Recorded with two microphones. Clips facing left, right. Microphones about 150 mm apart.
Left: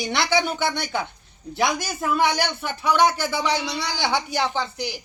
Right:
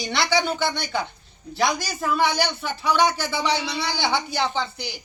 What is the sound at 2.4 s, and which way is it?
Speech, 50° left (ahead or behind).